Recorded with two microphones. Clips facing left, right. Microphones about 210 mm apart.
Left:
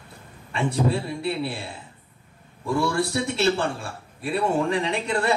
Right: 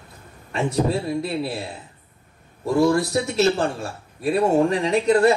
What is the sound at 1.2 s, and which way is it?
Speech, 40° right (ahead or behind).